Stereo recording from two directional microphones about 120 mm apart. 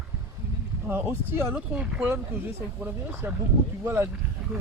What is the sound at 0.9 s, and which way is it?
Speech, 20° right (ahead or behind).